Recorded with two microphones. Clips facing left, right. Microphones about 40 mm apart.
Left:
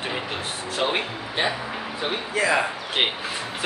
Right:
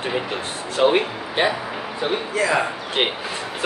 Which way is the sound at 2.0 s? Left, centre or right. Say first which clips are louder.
Right 2 dB; centre.